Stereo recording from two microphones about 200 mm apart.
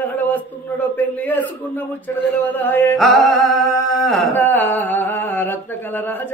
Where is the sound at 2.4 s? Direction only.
10° left (ahead or behind).